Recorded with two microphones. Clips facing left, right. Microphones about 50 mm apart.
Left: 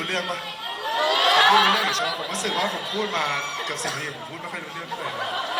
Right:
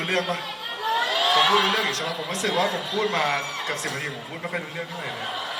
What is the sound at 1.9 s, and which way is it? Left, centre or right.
Speech, left.